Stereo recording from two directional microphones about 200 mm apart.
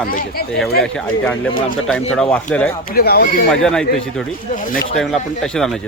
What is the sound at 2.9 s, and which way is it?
Speech, 50° left (ahead or behind).